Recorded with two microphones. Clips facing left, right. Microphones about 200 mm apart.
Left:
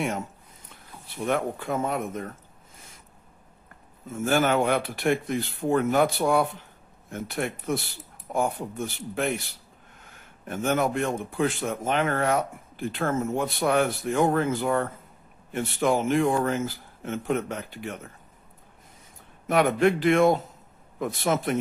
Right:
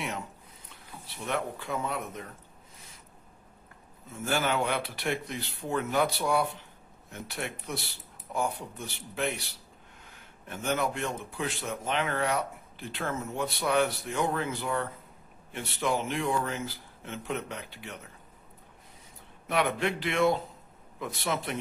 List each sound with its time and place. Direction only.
1.0 s speech: 50° left (ahead or behind)
4.1 s speech: 50° left (ahead or behind)
19.4 s speech: 45° left (ahead or behind)